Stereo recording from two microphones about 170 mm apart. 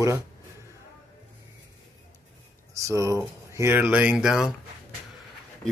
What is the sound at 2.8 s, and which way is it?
Speech, 20° right (ahead or behind).